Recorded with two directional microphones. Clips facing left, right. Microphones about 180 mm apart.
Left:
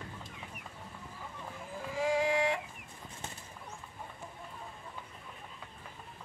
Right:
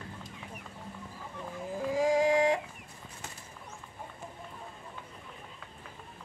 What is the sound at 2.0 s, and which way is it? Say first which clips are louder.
Music: right 4 dB; 40° right (ahead or behind).